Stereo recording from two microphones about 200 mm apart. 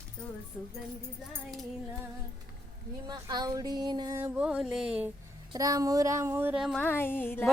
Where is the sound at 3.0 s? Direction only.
20° right (ahead or behind); by 5.1 s 5° right (ahead or behind).